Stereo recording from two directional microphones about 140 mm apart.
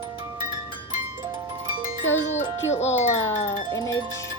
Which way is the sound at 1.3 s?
30° right (ahead or behind).